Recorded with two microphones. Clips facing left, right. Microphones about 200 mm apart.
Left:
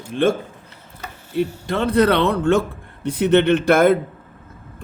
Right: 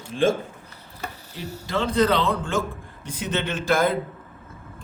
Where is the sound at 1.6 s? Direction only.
60° left (ahead or behind).